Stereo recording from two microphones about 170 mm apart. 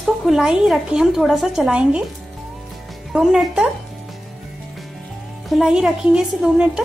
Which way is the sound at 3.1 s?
Centre (ahead or behind).